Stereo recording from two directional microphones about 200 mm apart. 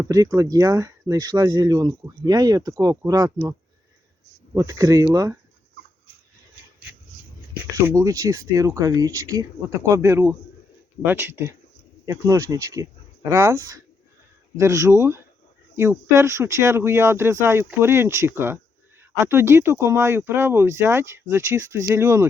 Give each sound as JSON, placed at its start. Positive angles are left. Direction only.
{"t": 0.0, "sound": "speech", "side_deg": -15}
{"t": 4.5, "sound": "speech", "side_deg": -15}
{"t": 7.6, "sound": "speech", "side_deg": -15}